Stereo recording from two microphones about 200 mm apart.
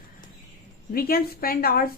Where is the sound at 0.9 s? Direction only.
50° left (ahead or behind).